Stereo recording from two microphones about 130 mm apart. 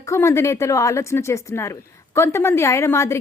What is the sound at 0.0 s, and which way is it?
A woman's voice, 20° left (ahead or behind).